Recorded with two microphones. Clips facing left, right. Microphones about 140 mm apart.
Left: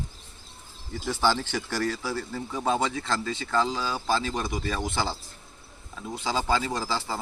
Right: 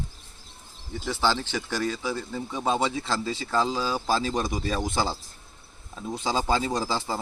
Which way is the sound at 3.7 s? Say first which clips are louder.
Right 3 dB; 15° right (ahead or behind).